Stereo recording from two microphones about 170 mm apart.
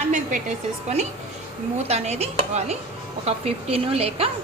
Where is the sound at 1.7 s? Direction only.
40° right (ahead or behind).